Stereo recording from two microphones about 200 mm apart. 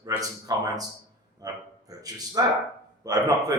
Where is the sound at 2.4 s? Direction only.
20° right (ahead or behind).